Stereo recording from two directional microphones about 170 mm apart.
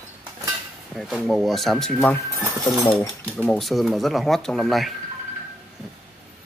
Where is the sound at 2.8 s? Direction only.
25° left (ahead or behind).